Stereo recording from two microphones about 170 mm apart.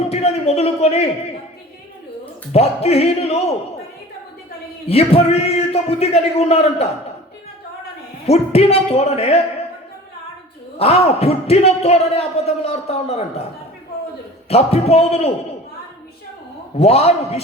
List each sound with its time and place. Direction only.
0.1 s a sound: 40° left (ahead or behind)
2.5 s a man's voice: 35° left (ahead or behind)
4.9 s a man's voice: 35° left (ahead or behind)
8.3 s a man's voice: 35° left (ahead or behind)
10.8 s a man's voice: 40° left (ahead or behind)
14.5 s a man's voice: 35° left (ahead or behind)
16.7 s a man's voice: 35° left (ahead or behind)